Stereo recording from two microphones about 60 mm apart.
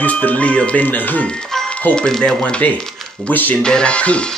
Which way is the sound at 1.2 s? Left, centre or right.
Centre.